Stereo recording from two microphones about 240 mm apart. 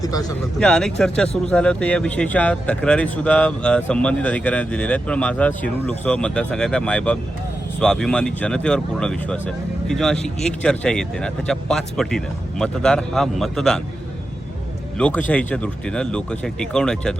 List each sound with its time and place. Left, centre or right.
0.0 s speech: centre
0.6 s speech: centre
14.9 s speech: centre